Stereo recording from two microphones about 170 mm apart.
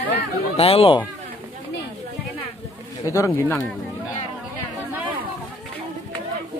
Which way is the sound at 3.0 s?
20° left (ahead or behind).